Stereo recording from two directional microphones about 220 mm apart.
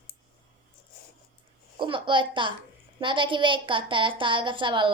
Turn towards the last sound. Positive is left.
turn(degrees=-20)  # may be behind; listen again after turning